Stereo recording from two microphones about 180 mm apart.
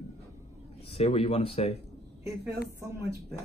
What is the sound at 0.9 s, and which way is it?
Speech, 35° left (ahead or behind).